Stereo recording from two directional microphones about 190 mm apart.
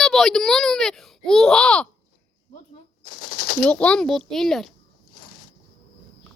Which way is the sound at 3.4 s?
50° left (ahead or behind).